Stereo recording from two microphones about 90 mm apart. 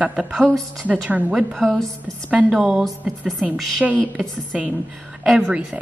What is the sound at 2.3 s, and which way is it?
Speech, 10° right (ahead or behind).